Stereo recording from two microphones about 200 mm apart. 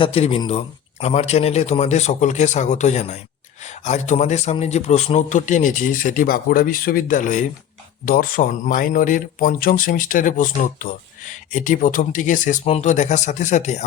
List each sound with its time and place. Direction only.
0.0 s a man's voice: 30° left (ahead or behind)